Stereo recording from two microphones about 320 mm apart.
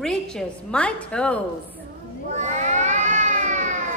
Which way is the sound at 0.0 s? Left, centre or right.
Centre.